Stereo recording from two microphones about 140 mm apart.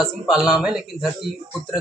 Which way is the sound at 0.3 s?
5° right (ahead or behind).